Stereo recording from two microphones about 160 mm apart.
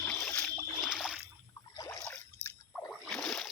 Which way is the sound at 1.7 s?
20° left (ahead or behind).